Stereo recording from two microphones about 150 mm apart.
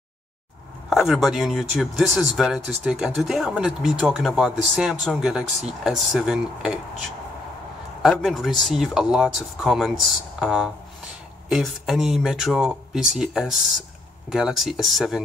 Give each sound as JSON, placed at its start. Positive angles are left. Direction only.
{"t": 0.8, "sound": "speech", "side_deg": 0}
{"t": 8.0, "sound": "speech", "side_deg": 0}